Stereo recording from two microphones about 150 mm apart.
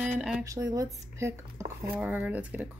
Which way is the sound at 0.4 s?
20° right (ahead or behind).